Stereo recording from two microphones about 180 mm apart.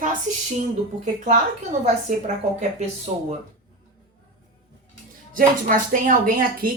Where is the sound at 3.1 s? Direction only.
35° right (ahead or behind).